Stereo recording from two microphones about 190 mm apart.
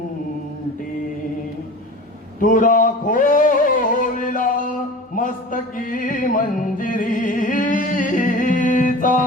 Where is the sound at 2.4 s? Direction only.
45° left (ahead or behind).